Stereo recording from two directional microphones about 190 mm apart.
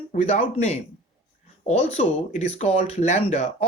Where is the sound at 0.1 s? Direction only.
35° left (ahead or behind).